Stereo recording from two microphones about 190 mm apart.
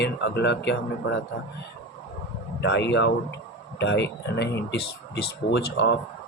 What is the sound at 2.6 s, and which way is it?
Speech, 65° left (ahead or behind).